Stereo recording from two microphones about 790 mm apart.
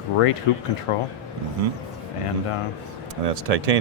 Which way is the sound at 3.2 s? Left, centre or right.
Right.